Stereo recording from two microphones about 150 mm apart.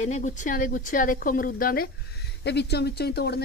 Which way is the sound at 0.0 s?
50° left (ahead or behind).